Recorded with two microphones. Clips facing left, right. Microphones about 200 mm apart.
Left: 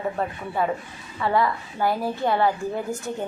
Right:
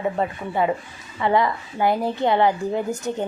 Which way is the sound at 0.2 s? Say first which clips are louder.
Right 3 dB; 10° right (ahead or behind).